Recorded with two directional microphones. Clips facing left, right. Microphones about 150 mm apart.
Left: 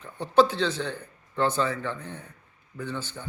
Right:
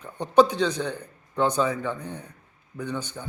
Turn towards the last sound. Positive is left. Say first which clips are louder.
# right 2 dB
turn(degrees=-15)  # may be behind; listen again after turning